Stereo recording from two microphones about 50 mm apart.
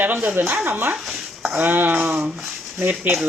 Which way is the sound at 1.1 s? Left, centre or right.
Centre.